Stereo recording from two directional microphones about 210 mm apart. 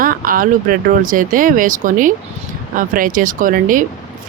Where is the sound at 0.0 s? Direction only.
40° right (ahead or behind).